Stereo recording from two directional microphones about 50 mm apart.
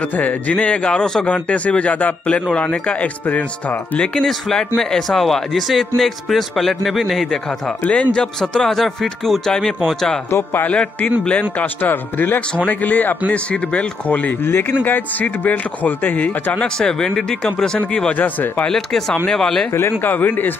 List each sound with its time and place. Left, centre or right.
0.0 s a man's voice: left; by 1.2 s centre
1.2 s a man's voice: left
4.0 s speech: centre
4.3 s a man's voice: centre
7.2 s speech: centre
7.8 s speech: left; by 10.2 s centre
10.7 s a man's voice: left
11.5 s speech: left
12.4 s a man's voice: left
14.4 s speech: left
16.6 s speech: centre
18.1 s speech: left
18.7 s speech: centre
20.0 s speech: left